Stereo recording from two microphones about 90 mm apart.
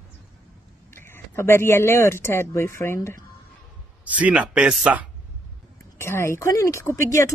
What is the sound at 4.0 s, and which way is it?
Speech, 15° right (ahead or behind).